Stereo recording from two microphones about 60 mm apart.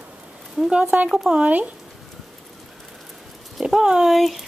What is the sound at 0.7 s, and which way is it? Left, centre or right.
Speech, right.